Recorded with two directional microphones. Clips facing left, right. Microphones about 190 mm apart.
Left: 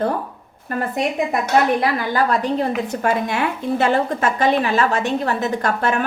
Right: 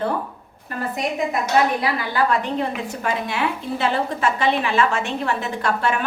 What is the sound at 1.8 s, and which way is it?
A woman's voice, 45° left (ahead or behind).